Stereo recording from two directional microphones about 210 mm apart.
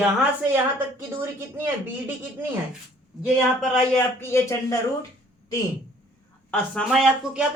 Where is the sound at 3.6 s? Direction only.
5° left (ahead or behind).